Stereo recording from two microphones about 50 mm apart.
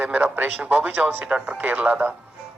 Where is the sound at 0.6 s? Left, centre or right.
Centre.